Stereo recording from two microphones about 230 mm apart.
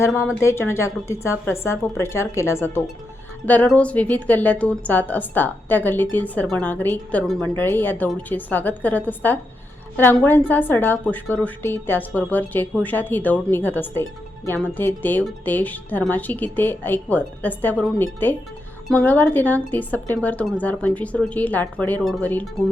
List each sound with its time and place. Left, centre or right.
0.3 s speech: centre